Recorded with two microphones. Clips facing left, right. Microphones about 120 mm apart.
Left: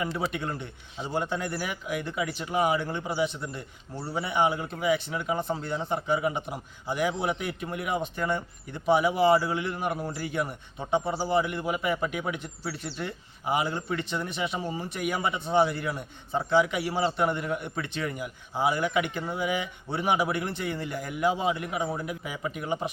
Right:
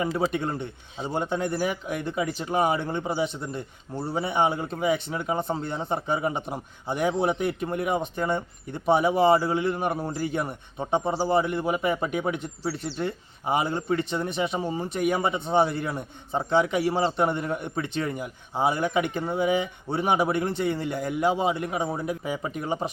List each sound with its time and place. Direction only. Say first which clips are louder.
0.3 s speech: right 5 dB; 25° right (ahead or behind)
2.7 s speech: right 2 dB; 20° right (ahead or behind)
10.0 s a man's voice: right 4 dB; 40° right (ahead or behind)
10.8 s speech: right 2 dB; 20° right (ahead or behind)
11.1 s speech: right 3 dB; 35° right (ahead or behind)
18.8 s a man's voice: right 2 dB; 40° right (ahead or behind)
19.1 s speech: right 5 dB; 25° right (ahead or behind)